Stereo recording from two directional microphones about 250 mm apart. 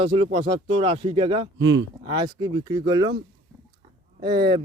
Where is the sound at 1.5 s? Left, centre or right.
Right.